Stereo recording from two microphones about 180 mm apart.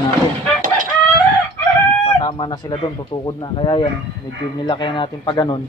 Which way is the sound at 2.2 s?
25° left (ahead or behind).